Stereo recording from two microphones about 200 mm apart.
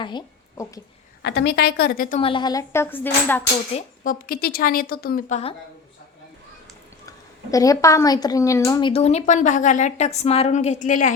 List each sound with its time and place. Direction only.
0.0 s a sound: 20° left (ahead or behind)
1.2 s a woman's voice: 55° left (ahead or behind)
2.2 s speech: 25° left (ahead or behind)
3.8 s a woman's voice: 45° left (ahead or behind)
7.5 s speech: 15° left (ahead or behind); by 11.1 s 40° left (ahead or behind)